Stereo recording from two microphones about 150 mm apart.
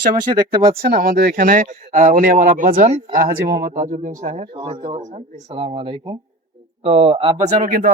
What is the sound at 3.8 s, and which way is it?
Speech, 55° right (ahead or behind).